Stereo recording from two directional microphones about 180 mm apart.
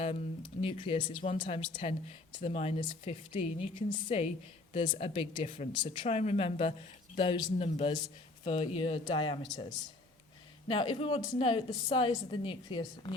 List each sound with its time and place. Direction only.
0.6 s a woman's voice: 30° left (ahead or behind)